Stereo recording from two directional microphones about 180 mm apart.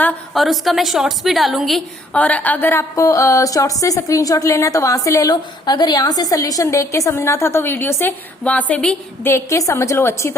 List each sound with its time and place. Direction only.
0.0 s a woman's voice: centre (ahead or behind)